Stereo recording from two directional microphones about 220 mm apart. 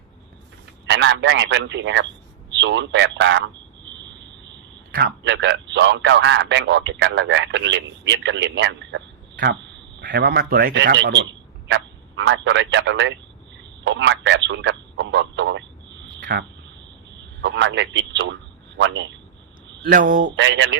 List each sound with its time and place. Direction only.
0.9 s a man's voice: 55° right (ahead or behind)
4.9 s a man's voice: 45° right (ahead or behind)
9.3 s a sound: 45° right (ahead or behind)
10.0 s a man's voice: 45° right (ahead or behind)
17.4 s a man's voice: 55° right (ahead or behind)
19.8 s speech: 40° right (ahead or behind)
20.3 s a man's voice: 55° right (ahead or behind)